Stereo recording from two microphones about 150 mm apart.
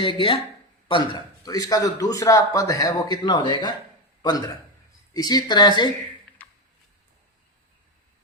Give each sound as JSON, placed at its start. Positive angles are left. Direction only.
{"t": 0.0, "sound": "a man's voice", "side_deg": 35}